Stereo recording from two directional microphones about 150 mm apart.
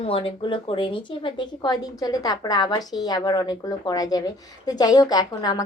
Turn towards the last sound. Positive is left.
turn(degrees=25)  # may be behind; listen again after turning